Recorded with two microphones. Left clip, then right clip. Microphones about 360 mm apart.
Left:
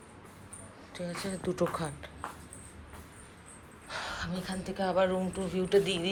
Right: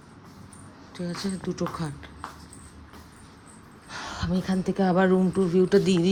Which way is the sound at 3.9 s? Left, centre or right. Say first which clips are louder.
Right 3 dB; centre.